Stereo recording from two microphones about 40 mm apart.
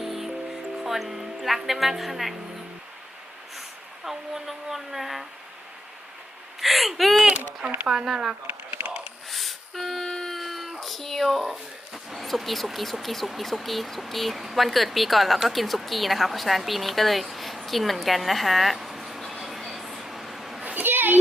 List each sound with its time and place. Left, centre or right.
0.0 s music: centre
0.9 s speech: centre
4.0 s speech: centre
6.6 s speech: centre
9.3 s a sound: centre
12.1 s a woman's voice: centre
20.7 s a sound: right